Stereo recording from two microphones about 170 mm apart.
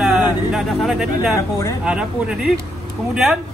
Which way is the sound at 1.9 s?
5° right (ahead or behind).